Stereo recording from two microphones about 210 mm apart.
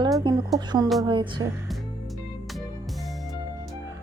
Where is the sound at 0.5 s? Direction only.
15° right (ahead or behind).